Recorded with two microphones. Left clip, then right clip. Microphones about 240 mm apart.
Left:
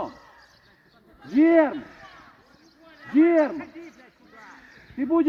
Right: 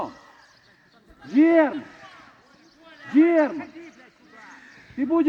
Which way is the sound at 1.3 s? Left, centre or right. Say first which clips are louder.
Right 1 dB; centre.